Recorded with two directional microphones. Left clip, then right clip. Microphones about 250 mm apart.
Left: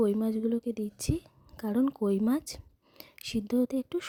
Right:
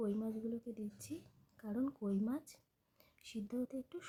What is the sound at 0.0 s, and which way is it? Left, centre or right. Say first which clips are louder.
Speech: left 13 dB; left.